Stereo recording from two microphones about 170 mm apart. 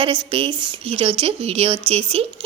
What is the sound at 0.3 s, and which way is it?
A woman's voice, 30° right (ahead or behind).